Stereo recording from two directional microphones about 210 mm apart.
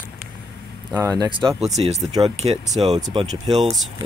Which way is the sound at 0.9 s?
20° right (ahead or behind).